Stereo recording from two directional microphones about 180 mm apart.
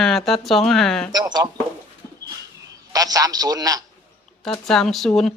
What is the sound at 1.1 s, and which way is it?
Speech, 25° right (ahead or behind).